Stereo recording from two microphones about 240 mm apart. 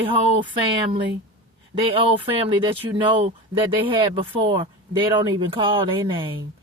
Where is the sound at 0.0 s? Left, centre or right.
Right.